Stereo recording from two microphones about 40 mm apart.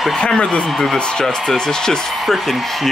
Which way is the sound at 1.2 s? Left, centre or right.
Centre.